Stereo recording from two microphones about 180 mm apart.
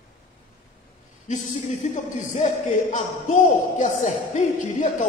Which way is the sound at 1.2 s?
40° left (ahead or behind).